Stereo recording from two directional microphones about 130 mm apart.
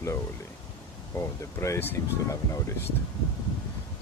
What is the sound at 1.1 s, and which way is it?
Speech, 20° left (ahead or behind).